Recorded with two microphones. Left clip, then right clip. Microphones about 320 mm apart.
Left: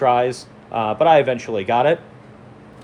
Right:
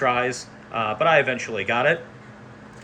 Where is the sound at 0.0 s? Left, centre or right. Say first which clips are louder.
Left 5 dB; centre.